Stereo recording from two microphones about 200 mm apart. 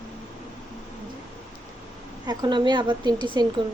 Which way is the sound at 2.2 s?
20° right (ahead or behind).